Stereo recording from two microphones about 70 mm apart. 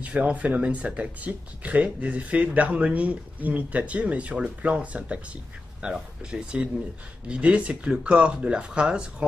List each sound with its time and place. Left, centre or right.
0.0 s speech: right